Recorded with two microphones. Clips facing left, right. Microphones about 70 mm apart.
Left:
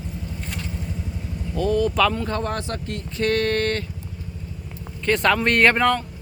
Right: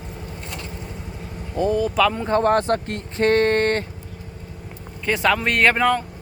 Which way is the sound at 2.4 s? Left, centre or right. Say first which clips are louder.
Right 9 dB; right.